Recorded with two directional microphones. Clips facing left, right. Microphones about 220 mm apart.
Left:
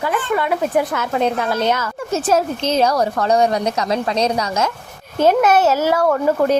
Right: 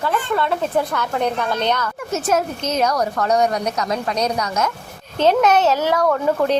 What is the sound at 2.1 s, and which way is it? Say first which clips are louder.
A woman's voice: left 3 dB; 30° left (ahead or behind).